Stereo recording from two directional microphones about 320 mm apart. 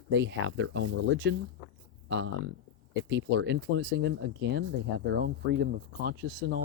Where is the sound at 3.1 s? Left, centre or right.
Right.